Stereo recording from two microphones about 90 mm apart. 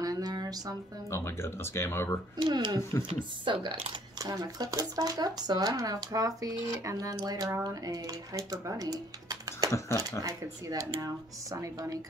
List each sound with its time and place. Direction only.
0.0 s a sound: 45° right (ahead or behind)
1.1 s speech: 30° left (ahead or behind)
2.3 s speech: 50° right (ahead or behind)
3.0 s speech: 65° right (ahead or behind)
4.2 s speech: 40° right (ahead or behind)
9.8 s speech: 35° left (ahead or behind)
10.2 s speech: 40° right (ahead or behind)